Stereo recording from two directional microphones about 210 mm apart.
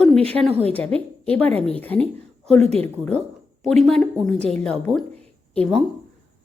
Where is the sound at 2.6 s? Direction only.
30° right (ahead or behind).